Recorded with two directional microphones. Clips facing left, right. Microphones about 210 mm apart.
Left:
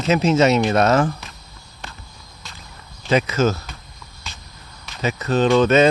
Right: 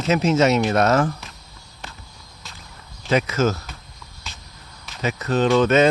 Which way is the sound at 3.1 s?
30° left (ahead or behind).